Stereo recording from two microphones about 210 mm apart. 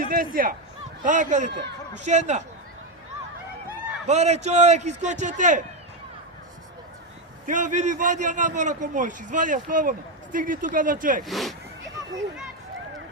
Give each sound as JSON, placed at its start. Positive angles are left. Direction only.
{"t": 0.0, "sound": "a man's voice", "side_deg": -45}
{"t": 1.5, "sound": "speech", "side_deg": -55}
{"t": 2.0, "sound": "a man's voice", "side_deg": -35}
{"t": 4.0, "sound": "a man's voice", "side_deg": -30}
{"t": 7.4, "sound": "a man's voice", "side_deg": -35}
{"t": 11.3, "sound": "speech", "side_deg": 0}